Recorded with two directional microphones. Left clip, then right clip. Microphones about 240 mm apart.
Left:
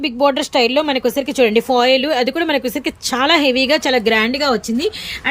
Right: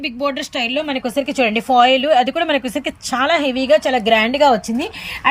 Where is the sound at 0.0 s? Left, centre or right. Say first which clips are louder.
Left 5 dB; centre.